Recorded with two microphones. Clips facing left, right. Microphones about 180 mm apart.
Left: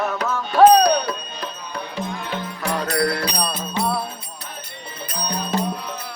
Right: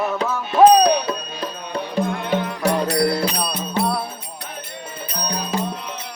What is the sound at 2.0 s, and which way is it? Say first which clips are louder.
Music: right 7 dB; 60° right (ahead or behind).